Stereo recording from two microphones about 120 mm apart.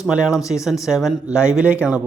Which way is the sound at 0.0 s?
5° right (ahead or behind).